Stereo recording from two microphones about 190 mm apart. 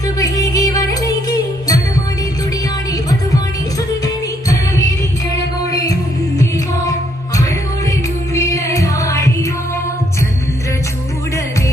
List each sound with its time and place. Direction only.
0.2 s music: 20° left (ahead or behind)
4.0 s music: 20° left (ahead or behind)
8.4 s music: 15° left (ahead or behind)